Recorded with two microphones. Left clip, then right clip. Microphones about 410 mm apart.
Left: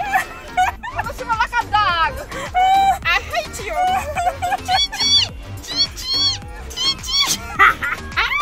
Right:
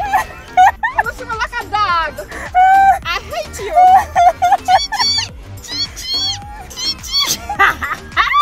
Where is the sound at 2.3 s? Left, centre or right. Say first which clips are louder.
Right 7 dB; centre.